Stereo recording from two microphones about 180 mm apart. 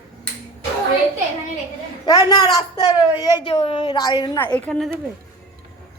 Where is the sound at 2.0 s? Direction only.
20° left (ahead or behind).